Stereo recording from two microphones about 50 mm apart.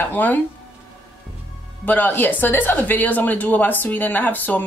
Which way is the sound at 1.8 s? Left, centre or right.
Left.